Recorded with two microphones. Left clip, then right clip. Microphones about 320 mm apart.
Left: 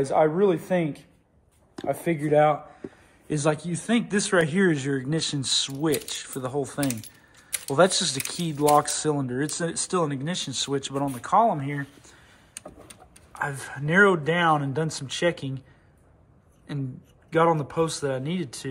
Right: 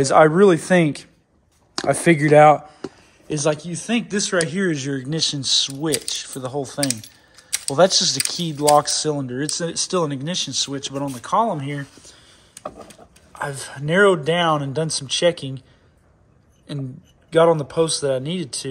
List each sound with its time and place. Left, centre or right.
0.0 s speech: right
3.3 s speech: centre
13.3 s speech: centre
17.3 s speech: centre